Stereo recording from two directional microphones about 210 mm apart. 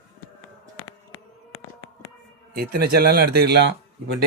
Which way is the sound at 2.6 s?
45° right (ahead or behind).